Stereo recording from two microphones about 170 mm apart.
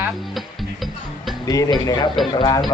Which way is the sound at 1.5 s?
20° left (ahead or behind).